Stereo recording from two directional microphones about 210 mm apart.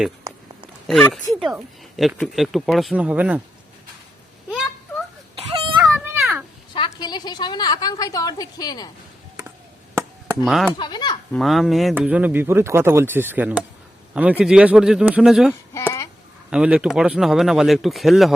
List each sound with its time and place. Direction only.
0.3 s a sound: 15° right (ahead or behind)
0.9 s speech: 5° left (ahead or behind)
4.4 s a sound: centre (ahead or behind)
6.7 s a woman's voice: 20° left (ahead or behind)
10.4 s speech: centre (ahead or behind)
10.8 s speech: 20° left (ahead or behind)
11.3 s a man's voice: centre (ahead or behind)